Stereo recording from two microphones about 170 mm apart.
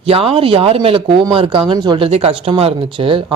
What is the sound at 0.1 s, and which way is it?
Speech, 35° right (ahead or behind).